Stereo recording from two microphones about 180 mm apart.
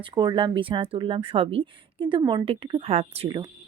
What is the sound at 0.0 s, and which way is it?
Speech, 25° right (ahead or behind).